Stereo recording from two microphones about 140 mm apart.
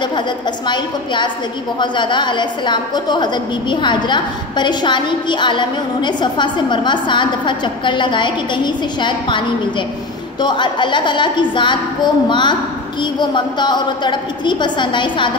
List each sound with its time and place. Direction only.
0.7 s a woman's voice: 35° left (ahead or behind)
10.4 s a woman's voice: 35° left (ahead or behind)